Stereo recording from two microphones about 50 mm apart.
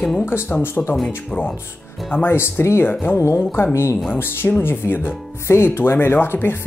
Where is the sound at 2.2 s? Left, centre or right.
Left.